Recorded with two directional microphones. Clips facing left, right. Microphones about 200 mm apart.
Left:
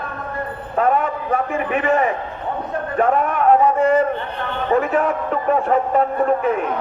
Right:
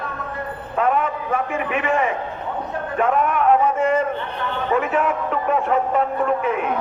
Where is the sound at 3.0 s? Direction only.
40° left (ahead or behind).